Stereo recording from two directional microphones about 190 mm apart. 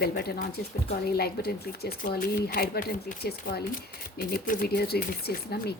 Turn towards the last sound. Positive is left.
turn(degrees=55)  # may be behind; listen again after turning